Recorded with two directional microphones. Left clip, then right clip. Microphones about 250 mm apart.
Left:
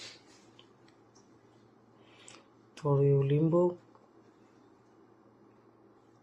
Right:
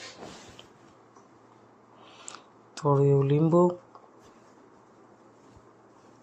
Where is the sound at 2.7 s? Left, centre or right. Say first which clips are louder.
Right 5 dB; centre.